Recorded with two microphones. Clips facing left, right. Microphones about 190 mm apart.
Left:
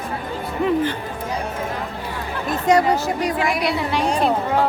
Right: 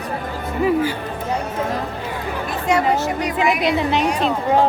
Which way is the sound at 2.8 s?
20° right (ahead or behind).